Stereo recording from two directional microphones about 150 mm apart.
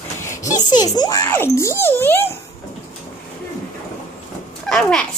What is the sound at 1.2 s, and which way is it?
Speech, 15° left (ahead or behind).